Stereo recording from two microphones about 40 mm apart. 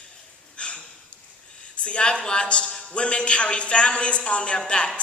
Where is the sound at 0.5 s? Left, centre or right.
Left.